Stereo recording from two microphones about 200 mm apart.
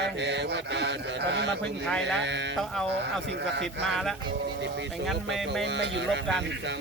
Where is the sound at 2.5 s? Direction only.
Centre (ahead or behind).